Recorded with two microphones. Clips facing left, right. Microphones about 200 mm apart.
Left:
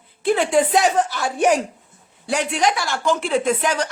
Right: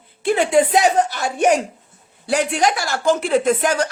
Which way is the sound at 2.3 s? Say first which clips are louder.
Right 2 dB; 40° right (ahead or behind).